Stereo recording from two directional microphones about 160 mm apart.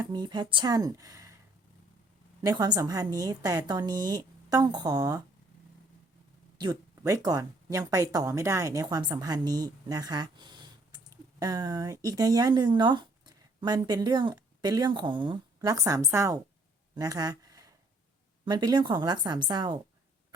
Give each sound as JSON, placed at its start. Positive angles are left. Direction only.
{"t": 0.0, "sound": "speech", "side_deg": -25}
{"t": 2.4, "sound": "speech", "side_deg": -25}
{"t": 6.6, "sound": "speech", "side_deg": -25}
{"t": 16.9, "sound": "a sound", "side_deg": -25}
{"t": 18.4, "sound": "speech", "side_deg": -25}